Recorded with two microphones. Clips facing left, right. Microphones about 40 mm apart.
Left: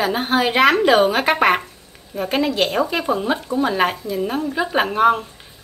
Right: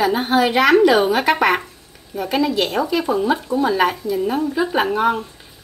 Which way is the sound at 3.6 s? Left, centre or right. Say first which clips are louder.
Right 2 dB; left.